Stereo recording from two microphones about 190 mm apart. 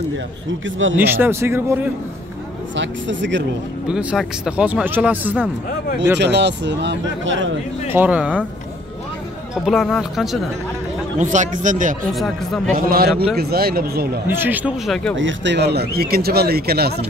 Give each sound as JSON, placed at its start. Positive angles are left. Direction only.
{"t": 0.7, "sound": "speech", "side_deg": -90}
{"t": 0.9, "sound": "speech", "side_deg": -10}
{"t": 2.7, "sound": "speech", "side_deg": -75}
{"t": 3.8, "sound": "speech", "side_deg": -5}
{"t": 6.1, "sound": "speech", "side_deg": -65}
{"t": 7.9, "sound": "speech", "side_deg": -10}
{"t": 9.7, "sound": "speech", "side_deg": 0}
{"t": 11.1, "sound": "speech", "side_deg": -40}
{"t": 12.1, "sound": "speech", "side_deg": 0}
{"t": 12.7, "sound": "speech", "side_deg": -50}
{"t": 14.2, "sound": "speech", "side_deg": -10}
{"t": 15.1, "sound": "speech", "side_deg": -75}